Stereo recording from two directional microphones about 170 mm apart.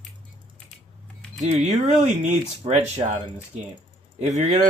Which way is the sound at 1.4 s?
40° right (ahead or behind).